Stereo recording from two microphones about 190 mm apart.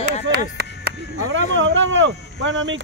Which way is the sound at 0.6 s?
60° right (ahead or behind).